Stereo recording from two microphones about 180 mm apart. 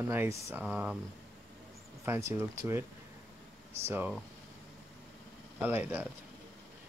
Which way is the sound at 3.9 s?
10° right (ahead or behind).